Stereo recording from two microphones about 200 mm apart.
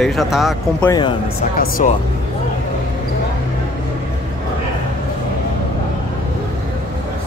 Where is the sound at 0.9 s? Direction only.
25° left (ahead or behind).